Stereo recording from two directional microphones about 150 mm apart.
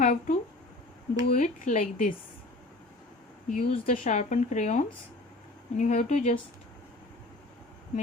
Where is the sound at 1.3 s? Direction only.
60° left (ahead or behind).